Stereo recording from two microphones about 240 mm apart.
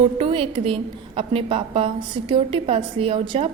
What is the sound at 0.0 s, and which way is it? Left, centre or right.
A woman's voice, right.